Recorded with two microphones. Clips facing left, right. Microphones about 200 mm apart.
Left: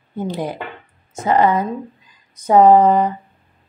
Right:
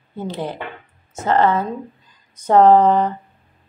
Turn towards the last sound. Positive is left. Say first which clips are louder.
# left 1 dB
turn(degrees=10)  # may be behind; listen again after turning